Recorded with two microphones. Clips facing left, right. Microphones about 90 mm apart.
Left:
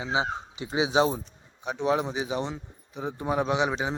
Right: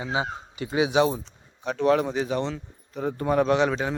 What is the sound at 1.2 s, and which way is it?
Speech, 15° left (ahead or behind).